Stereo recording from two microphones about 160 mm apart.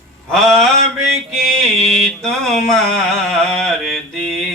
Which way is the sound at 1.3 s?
Centre (ahead or behind).